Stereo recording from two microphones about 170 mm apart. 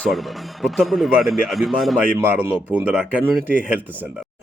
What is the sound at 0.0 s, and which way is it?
Speech, centre (ahead or behind).